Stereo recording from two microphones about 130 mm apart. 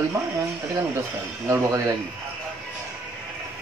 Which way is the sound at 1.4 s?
25° right (ahead or behind).